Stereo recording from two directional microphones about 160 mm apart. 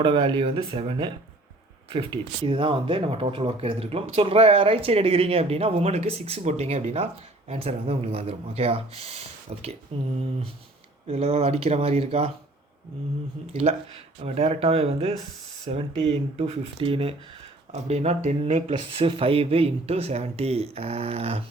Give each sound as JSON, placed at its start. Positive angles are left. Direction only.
{"t": 0.0, "sound": "speech", "side_deg": -30}
{"t": 11.1, "sound": "speech", "side_deg": -40}
{"t": 13.5, "sound": "speech", "side_deg": -40}